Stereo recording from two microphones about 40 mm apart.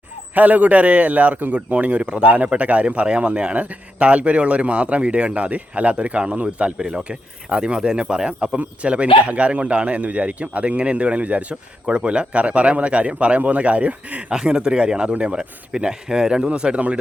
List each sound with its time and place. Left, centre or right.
0.3 s speech: right
2.2 s speech: right
6.7 s speech: centre
8.5 s speech: right
14.3 s speech: right